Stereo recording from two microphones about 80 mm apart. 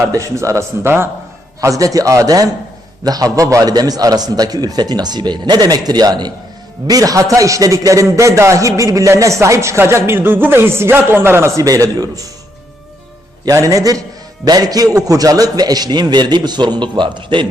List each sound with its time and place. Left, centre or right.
0.3 s a man's voice: right
1.8 s a man's voice: right
13.5 s a man's voice: right